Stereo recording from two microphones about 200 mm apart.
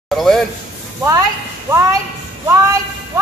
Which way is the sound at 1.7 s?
15° right (ahead or behind).